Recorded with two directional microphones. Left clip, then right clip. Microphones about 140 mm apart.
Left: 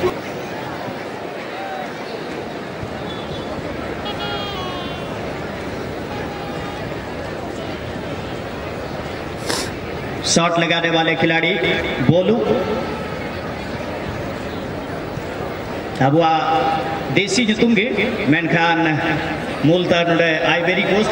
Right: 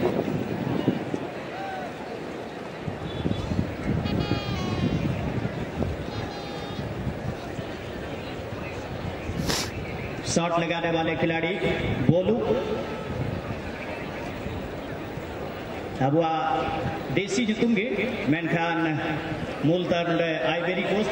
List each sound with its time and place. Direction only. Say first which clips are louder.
10.2 s a man's voice: left 9 dB; 35° left (ahead or behind)
16.0 s a man's voice: left 8 dB; 35° left (ahead or behind)